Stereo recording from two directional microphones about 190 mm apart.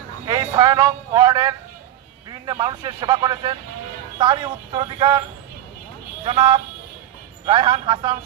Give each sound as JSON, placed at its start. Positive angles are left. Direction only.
{"t": 0.3, "sound": "speech", "side_deg": -20}
{"t": 6.2, "sound": "speech", "side_deg": -35}